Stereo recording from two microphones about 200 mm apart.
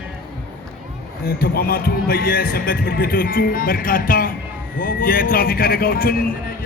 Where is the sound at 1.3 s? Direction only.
50° left (ahead or behind).